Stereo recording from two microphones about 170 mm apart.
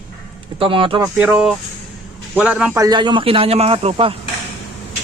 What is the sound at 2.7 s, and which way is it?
Speech, 25° right (ahead or behind).